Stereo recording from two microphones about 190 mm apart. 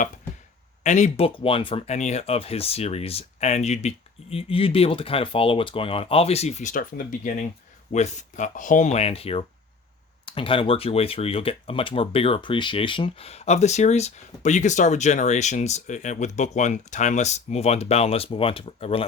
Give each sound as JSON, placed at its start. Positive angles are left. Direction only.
{"t": 0.9, "sound": "speech", "side_deg": 40}